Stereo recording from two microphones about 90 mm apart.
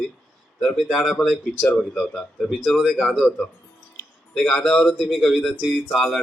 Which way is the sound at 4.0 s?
30° left (ahead or behind).